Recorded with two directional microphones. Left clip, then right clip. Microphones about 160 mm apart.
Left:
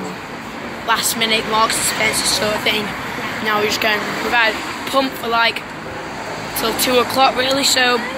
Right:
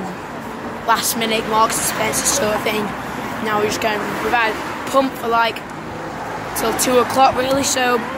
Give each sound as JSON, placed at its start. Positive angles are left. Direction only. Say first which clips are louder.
{"t": 0.9, "sound": "speech", "louder": "right 1 dB", "side_deg": -30}
{"t": 1.2, "sound": "speech", "louder": "left 2 dB", "side_deg": -10}
{"t": 3.4, "sound": "speech", "louder": "left 2 dB", "side_deg": 0}
{"t": 4.3, "sound": "speech", "louder": "left 2 dB", "side_deg": -10}
{"t": 6.6, "sound": "speech", "louder": "even", "side_deg": -15}